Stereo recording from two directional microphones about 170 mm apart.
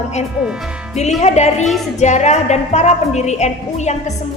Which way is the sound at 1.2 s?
40° left (ahead or behind).